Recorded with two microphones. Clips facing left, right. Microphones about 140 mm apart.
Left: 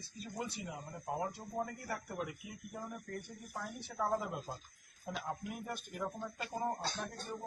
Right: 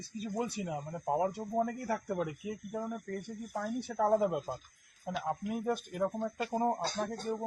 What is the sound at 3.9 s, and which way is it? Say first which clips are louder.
Speech: right 8 dB; 65° right (ahead or behind).